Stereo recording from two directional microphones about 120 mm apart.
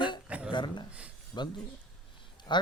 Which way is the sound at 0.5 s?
40° left (ahead or behind).